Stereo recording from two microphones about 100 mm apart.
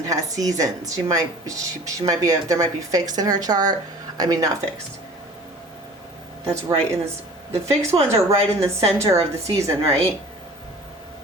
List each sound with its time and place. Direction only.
0.1 s a woman's voice: 35° right (ahead or behind)
6.4 s a woman's voice: 30° right (ahead or behind)